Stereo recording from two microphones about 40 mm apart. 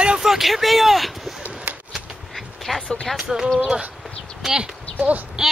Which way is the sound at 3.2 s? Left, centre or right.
Centre.